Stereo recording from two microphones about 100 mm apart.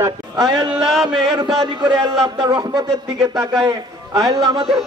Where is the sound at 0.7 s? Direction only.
Centre (ahead or behind).